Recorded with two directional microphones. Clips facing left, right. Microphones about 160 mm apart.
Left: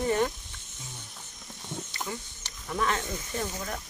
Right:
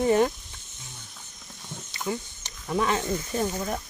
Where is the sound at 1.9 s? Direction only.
20° right (ahead or behind).